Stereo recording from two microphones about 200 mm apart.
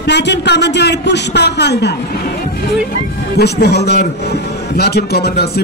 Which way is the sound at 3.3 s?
55° left (ahead or behind).